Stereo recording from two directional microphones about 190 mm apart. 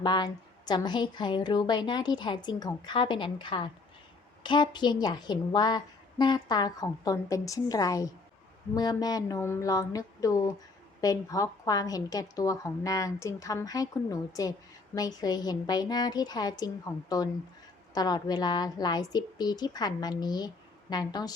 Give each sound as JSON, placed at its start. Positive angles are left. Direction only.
{"t": 0.0, "sound": "a woman's voice", "side_deg": 20}